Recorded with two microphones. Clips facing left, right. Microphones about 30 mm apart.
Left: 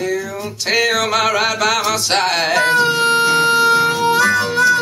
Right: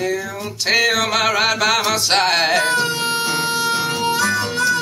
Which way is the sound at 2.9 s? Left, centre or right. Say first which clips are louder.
Left 6 dB; centre.